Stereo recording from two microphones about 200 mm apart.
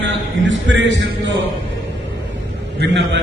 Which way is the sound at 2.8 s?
60° right (ahead or behind).